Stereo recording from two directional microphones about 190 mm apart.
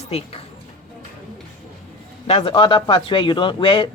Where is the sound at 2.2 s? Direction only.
30° left (ahead or behind).